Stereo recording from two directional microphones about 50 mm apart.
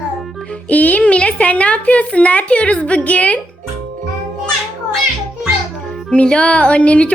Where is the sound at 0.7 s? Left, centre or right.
Left.